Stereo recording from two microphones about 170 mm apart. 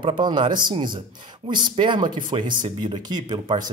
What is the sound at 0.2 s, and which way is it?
Speech, 25° right (ahead or behind).